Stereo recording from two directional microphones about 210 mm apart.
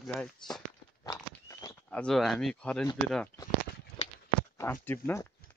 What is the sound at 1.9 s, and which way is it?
Speech, 5° left (ahead or behind).